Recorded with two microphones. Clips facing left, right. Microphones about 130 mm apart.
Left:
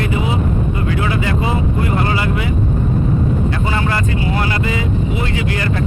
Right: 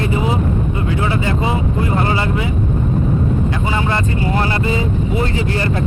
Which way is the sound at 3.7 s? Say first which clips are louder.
Even; 20° right (ahead or behind).